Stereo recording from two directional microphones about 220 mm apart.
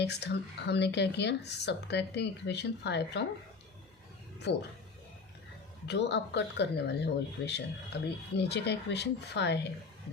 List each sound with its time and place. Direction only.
0.0 s speech: 50° left (ahead or behind)
4.5 s speech: 50° left (ahead or behind)
5.9 s speech: 50° left (ahead or behind)